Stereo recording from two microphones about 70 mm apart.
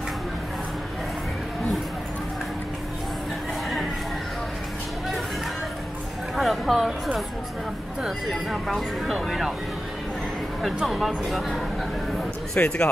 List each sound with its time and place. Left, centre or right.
6.3 s a sound: centre
8.3 s speech: centre
11.2 s speech: centre
12.5 s speech: centre